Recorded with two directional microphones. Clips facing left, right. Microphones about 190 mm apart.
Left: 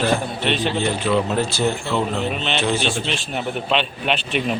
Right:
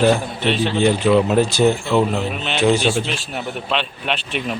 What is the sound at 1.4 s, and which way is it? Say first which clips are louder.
A man's voice: right 5 dB; 15° right (ahead or behind).